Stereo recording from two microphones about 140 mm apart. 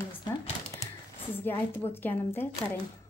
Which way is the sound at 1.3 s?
15° left (ahead or behind).